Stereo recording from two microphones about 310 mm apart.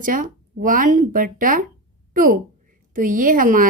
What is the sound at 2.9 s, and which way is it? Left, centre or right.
Speech, right.